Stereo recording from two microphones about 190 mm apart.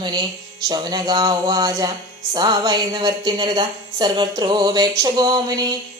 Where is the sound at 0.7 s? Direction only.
20° right (ahead or behind).